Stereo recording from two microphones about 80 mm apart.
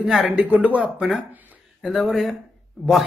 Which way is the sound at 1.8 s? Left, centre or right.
Centre.